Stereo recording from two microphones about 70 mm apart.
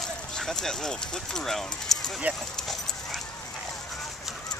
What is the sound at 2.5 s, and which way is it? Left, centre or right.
Dog, centre.